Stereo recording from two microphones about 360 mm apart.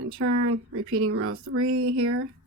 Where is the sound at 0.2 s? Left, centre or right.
Right.